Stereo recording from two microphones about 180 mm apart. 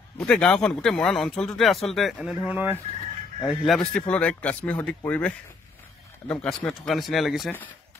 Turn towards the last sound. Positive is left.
turn(degrees=0)  # may be behind; listen again after turning